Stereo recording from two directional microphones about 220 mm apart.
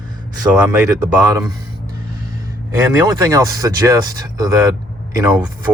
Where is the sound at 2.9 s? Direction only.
15° right (ahead or behind).